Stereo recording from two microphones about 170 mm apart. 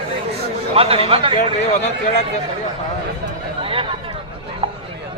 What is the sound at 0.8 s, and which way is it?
Speech, 35° right (ahead or behind).